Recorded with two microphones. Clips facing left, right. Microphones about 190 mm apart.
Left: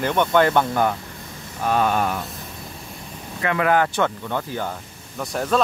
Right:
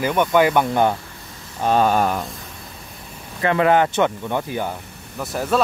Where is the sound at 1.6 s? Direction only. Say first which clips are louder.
Right 3 dB; 30° right (ahead or behind).